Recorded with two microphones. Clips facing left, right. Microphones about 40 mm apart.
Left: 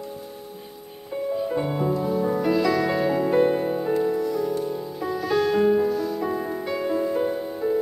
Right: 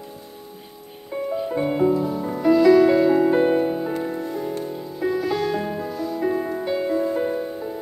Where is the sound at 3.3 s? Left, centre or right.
Right.